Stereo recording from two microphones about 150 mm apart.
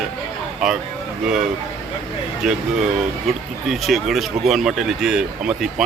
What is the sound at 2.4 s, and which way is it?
Speech, centre (ahead or behind).